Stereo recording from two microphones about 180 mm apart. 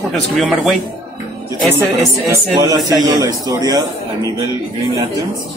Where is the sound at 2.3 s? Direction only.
20° right (ahead or behind).